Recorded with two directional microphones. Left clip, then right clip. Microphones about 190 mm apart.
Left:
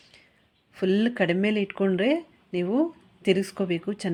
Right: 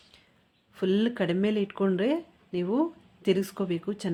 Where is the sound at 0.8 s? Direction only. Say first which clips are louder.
Left 3 dB; 10° left (ahead or behind).